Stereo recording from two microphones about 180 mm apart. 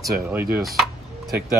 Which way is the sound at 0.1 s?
10° right (ahead or behind).